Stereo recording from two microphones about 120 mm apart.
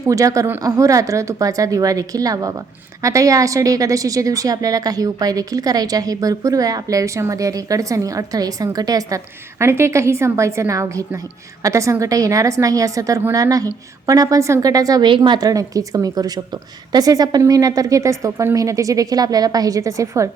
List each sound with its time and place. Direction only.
0.1 s a woman's voice: 25° right (ahead or behind)